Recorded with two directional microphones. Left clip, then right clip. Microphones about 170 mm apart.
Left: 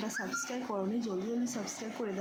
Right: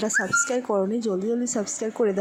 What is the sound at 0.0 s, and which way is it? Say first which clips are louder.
A woman's voice: right 14 dB; 55° right (ahead or behind).